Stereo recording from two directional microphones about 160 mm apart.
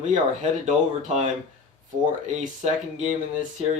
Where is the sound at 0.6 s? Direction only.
50° right (ahead or behind).